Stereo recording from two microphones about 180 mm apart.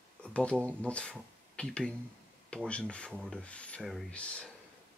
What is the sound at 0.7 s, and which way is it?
Speech, 5° left (ahead or behind).